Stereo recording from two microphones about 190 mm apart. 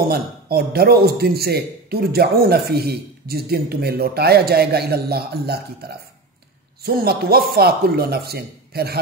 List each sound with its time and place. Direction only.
0.1 s a man's voice: 55° right (ahead or behind)